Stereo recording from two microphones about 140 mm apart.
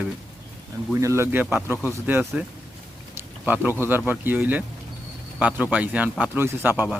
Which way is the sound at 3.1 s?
15° right (ahead or behind).